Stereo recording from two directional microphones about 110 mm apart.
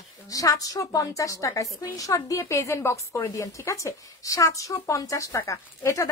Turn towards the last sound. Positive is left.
turn(degrees=25)  # may be behind; listen again after turning